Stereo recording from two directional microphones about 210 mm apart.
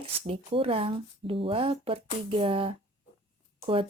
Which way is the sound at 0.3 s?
25° right (ahead or behind).